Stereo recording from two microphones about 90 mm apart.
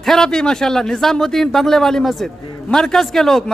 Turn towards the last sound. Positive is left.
turn(degrees=5)  # may be behind; listen again after turning